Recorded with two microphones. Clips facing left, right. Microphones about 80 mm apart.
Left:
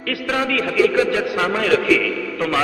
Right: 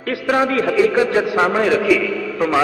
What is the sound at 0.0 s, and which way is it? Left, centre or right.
A man's voice, right.